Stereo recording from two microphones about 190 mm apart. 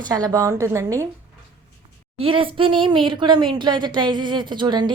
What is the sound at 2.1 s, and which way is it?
Speech, 30° right (ahead or behind).